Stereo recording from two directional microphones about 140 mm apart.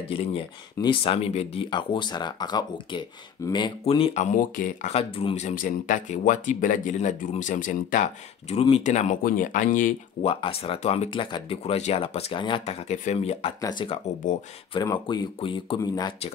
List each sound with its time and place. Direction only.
0.1 s speech: 40° left (ahead or behind)
4.2 s speech: 55° left (ahead or behind)
4.9 s speech: 45° left (ahead or behind); by 8.1 s 70° left (ahead or behind)
8.5 s speech: 45° left (ahead or behind)
8.8 s speech: 65° left (ahead or behind)
10.2 s speech: 45° left (ahead or behind)
13.6 s speech: 30° left (ahead or behind)